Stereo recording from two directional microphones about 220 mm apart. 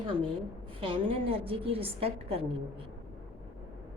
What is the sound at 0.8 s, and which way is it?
Speech, 25° right (ahead or behind).